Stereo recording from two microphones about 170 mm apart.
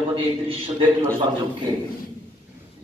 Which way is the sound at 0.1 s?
35° right (ahead or behind).